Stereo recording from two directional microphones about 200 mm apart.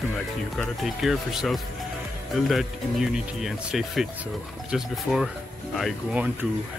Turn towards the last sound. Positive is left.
turn(degrees=0)  # may be behind; listen again after turning